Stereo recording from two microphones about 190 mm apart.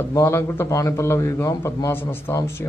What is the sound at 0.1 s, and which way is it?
A man's voice, 15° left (ahead or behind).